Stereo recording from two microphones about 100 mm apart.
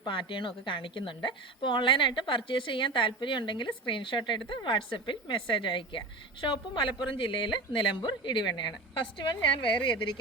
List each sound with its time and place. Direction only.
0.0 s a woman's voice: 55° left (ahead or behind)